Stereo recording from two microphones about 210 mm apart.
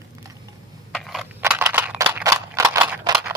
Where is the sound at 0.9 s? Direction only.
Centre (ahead or behind).